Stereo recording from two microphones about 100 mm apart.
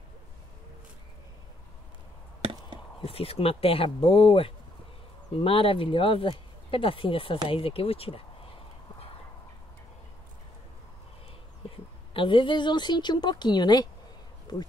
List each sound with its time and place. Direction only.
3.0 s speech: 70° left (ahead or behind)
11.7 s a woman's voice: 60° left (ahead or behind); by 13.8 s 45° left (ahead or behind)